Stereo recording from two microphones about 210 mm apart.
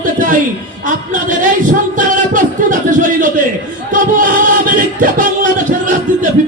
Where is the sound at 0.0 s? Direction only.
40° right (ahead or behind).